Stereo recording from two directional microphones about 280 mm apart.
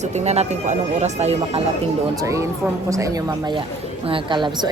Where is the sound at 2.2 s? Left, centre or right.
Centre.